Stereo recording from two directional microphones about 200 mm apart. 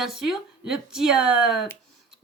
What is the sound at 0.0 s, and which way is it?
Speech, centre (ahead or behind).